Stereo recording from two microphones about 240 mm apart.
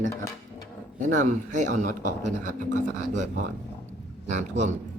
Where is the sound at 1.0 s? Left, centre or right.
Right.